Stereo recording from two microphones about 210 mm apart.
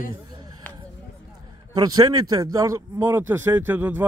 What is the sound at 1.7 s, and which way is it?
Speech, 20° right (ahead or behind).